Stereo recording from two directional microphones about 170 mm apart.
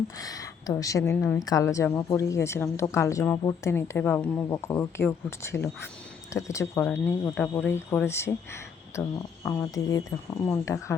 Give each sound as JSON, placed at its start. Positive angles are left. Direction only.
{"t": 0.2, "sound": "a woman's voice", "side_deg": 20}